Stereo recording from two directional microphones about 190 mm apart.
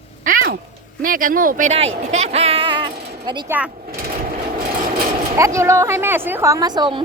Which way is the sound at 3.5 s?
5° right (ahead or behind).